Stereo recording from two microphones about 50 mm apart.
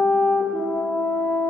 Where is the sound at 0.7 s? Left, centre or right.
Left.